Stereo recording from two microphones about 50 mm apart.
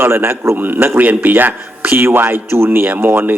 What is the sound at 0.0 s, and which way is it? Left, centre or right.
Speech, right.